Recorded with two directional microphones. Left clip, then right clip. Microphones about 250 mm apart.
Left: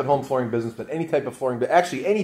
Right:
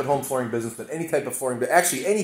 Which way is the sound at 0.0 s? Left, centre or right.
Right.